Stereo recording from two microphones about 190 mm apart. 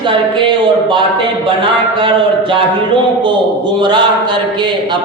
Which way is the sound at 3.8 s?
25° right (ahead or behind).